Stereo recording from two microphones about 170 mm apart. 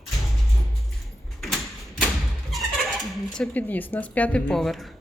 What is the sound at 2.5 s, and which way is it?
Speech, centre (ahead or behind).